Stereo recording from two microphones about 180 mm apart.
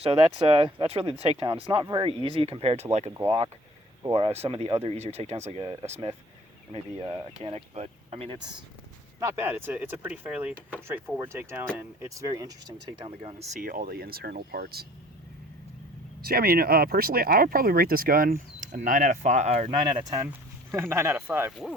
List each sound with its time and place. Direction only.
0.0 s speech: 30° right (ahead or behind)
2.0 s speech: 30° right (ahead or behind)
4.1 s speech: 35° right (ahead or behind)
6.7 s speech: 20° right (ahead or behind)
7.4 s speech: 35° right (ahead or behind)
9.2 s speech: 10° right (ahead or behind); by 13.5 s 30° right (ahead or behind)
13.6 s speech: 50° right (ahead or behind)
16.2 s speech: 55° right (ahead or behind); by 19.8 s 35° right (ahead or behind)
19.8 s speech: 25° right (ahead or behind)
20.2 s speech: 15° right (ahead or behind)